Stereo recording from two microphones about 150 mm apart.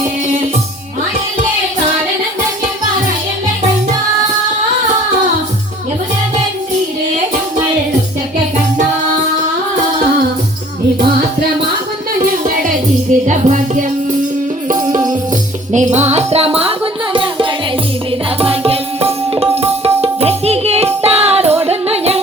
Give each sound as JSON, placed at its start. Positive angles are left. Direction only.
{"t": 13.2, "sound": "music", "side_deg": -55}
{"t": 14.8, "sound": "music", "side_deg": -25}
{"t": 15.7, "sound": "music", "side_deg": -50}
{"t": 18.3, "sound": "tabla", "side_deg": -40}
{"t": 21.6, "sound": "music", "side_deg": -40}